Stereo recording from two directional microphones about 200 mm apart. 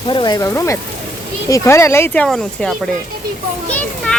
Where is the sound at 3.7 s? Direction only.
5° left (ahead or behind).